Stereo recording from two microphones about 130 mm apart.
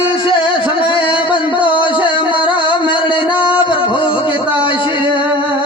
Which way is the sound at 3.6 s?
40° left (ahead or behind).